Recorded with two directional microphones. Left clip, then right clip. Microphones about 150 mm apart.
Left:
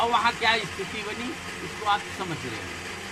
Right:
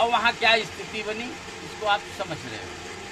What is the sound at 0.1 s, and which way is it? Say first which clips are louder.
Music: right 2 dB; 30° right (ahead or behind).